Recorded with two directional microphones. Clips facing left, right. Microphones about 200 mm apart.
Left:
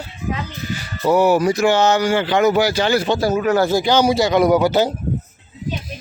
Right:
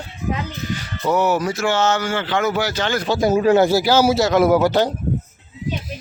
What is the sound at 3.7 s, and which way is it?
Speech, 5° right (ahead or behind).